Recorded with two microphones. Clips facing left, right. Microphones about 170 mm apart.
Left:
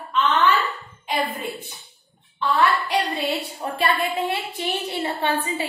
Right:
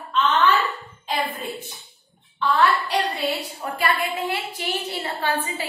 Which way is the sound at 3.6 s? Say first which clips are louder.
Left 1 dB; 25° left (ahead or behind).